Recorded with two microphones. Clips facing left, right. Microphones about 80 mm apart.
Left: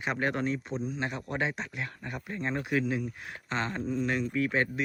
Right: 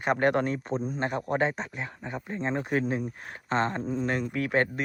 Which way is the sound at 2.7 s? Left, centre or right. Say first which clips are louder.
Right 2 dB; right.